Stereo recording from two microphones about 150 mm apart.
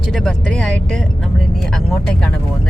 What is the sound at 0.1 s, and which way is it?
Speech, 5° left (ahead or behind).